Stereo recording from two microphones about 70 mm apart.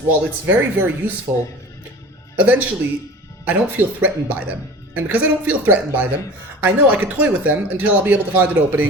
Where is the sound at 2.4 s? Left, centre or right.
Right.